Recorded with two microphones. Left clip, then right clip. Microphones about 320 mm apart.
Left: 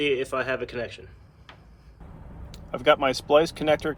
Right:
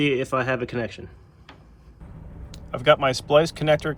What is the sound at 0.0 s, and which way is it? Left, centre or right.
Speech, centre.